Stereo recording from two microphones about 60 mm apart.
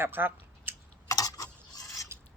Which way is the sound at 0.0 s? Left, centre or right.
Right.